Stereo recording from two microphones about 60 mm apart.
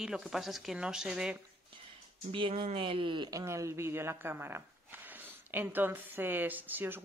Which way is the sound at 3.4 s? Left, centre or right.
Right.